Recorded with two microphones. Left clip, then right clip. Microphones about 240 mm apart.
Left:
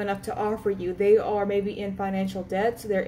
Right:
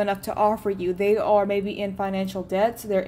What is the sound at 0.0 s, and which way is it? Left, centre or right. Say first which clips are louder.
A woman's voice: right 6 dB; right.